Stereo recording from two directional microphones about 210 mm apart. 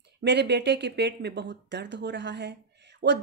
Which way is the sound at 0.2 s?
55° right (ahead or behind).